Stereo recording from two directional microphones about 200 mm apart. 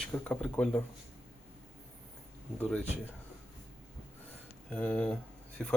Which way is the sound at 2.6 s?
10° left (ahead or behind).